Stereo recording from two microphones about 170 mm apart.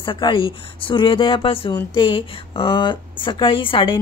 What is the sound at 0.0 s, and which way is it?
A woman's voice, 30° left (ahead or behind).